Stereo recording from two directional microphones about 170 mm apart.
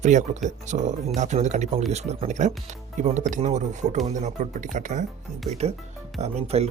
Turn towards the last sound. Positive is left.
turn(degrees=-35)  # may be behind; listen again after turning